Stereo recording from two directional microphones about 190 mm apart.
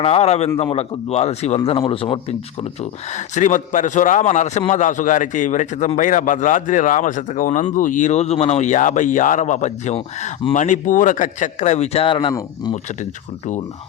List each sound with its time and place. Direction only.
0.0 s a man's voice: 35° left (ahead or behind)
3.1 s a man's voice: 40° left (ahead or behind)